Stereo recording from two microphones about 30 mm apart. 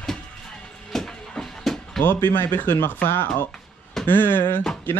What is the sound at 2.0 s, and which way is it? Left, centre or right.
Speech, left.